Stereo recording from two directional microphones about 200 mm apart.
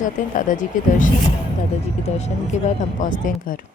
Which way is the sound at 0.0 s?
40° left (ahead or behind).